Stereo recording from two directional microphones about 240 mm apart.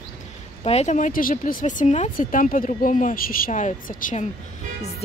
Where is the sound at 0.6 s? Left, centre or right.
Left.